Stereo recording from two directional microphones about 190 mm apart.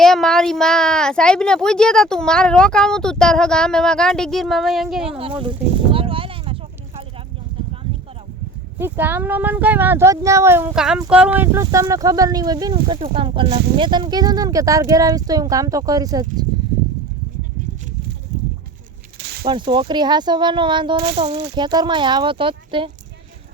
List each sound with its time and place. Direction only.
0.0 s speech: centre (ahead or behind)
5.0 s speech: 30° right (ahead or behind)
8.8 s speech: 10° right (ahead or behind); by 13.5 s 25° right (ahead or behind)
13.5 s speech: 60° right (ahead or behind)
13.7 s speech: 25° right (ahead or behind)
19.2 s a sound: 55° right (ahead or behind)
19.5 s speech: 25° right (ahead or behind)